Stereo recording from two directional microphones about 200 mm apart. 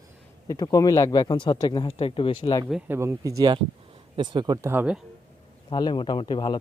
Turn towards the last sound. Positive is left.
turn(degrees=25)  # may be behind; listen again after turning